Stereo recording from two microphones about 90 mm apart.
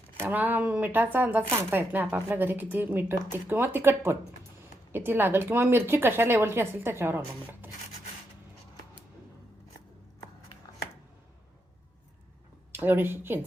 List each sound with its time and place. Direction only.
0.2 s speech: 20° right (ahead or behind)
12.7 s speech: 25° right (ahead or behind)